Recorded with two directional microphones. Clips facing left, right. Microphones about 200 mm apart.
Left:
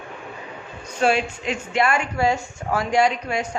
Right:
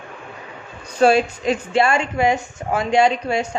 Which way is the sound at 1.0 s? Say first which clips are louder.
Right 6 dB; 35° right (ahead or behind).